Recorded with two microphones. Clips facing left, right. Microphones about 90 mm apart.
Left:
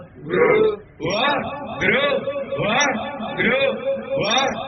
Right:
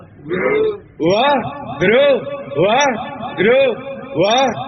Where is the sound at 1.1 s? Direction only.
50° right (ahead or behind).